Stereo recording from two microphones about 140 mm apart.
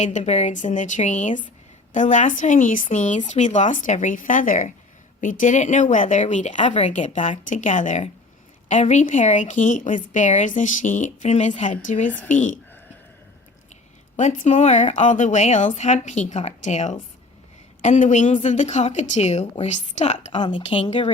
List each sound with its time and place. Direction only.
0.0 s a woman's voice: 55° left (ahead or behind)
14.2 s a woman's voice: 60° left (ahead or behind)
20.4 s speech: 40° left (ahead or behind)